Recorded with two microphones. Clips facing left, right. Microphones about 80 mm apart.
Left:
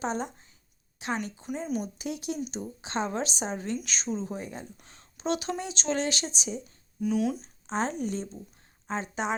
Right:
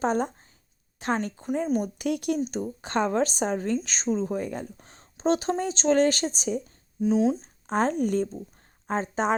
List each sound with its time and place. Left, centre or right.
0.0 s speech: right
4.8 s speech: right
7.0 s speech: right
7.4 s speech: right